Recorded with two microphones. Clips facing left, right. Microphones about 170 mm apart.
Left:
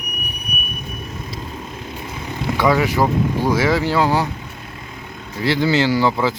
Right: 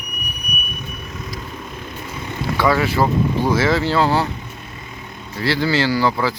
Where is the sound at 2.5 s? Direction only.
15° left (ahead or behind).